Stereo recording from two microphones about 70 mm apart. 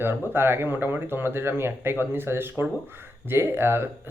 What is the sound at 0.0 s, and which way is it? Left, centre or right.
Speech, right.